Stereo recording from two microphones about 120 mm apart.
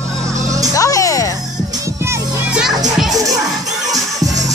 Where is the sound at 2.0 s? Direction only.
20° right (ahead or behind).